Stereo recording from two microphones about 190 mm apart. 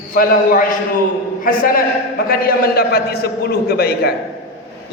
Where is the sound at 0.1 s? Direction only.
50° left (ahead or behind).